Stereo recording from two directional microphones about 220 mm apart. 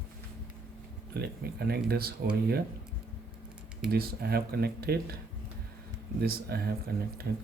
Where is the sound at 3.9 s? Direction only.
45° right (ahead or behind).